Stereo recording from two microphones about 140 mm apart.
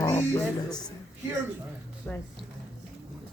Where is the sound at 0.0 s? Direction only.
15° left (ahead or behind).